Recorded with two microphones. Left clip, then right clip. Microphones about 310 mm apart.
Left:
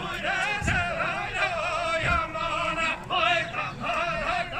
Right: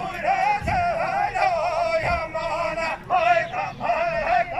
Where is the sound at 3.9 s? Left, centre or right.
Centre.